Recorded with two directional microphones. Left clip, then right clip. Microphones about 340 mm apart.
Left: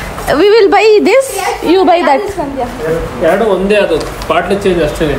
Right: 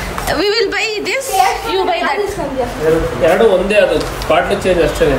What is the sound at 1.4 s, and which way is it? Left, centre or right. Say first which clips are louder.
Speech: left 4 dB; left.